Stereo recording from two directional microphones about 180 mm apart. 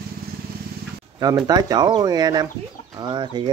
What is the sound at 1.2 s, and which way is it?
Speech, 20° right (ahead or behind).